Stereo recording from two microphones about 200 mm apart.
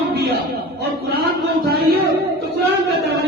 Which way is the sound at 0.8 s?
55° right (ahead or behind).